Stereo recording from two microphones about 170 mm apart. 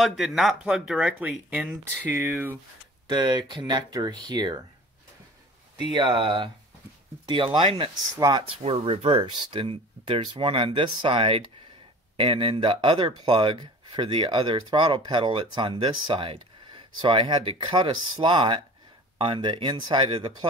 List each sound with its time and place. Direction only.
0.0 s speech: centre (ahead or behind)
3.1 s speech: 25° right (ahead or behind)
5.8 s speech: 30° right (ahead or behind)